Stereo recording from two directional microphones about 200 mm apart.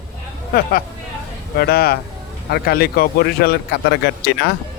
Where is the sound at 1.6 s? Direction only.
50° left (ahead or behind).